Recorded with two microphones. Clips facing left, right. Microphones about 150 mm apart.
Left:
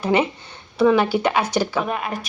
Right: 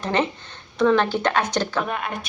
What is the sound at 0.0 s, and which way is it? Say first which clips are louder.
Speech: left 3 dB; 10° left (ahead or behind).